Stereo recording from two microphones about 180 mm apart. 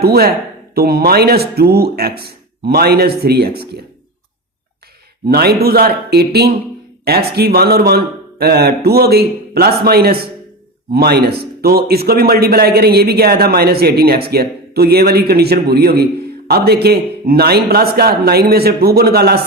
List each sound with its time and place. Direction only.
0.0 s speech: 60° right (ahead or behind)
5.3 s speech: 60° right (ahead or behind)